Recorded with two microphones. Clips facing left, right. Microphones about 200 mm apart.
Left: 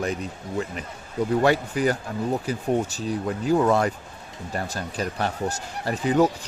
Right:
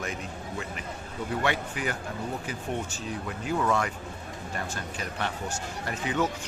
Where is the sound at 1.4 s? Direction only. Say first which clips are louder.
Left 8 dB; 40° left (ahead or behind).